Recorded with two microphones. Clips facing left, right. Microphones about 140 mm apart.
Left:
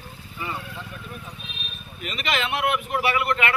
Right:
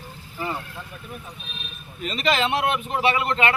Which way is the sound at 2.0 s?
35° right (ahead or behind).